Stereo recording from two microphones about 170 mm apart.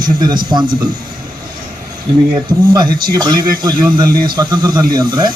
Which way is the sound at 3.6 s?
25° right (ahead or behind).